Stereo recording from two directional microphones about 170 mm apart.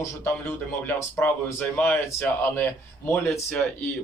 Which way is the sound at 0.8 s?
10° left (ahead or behind).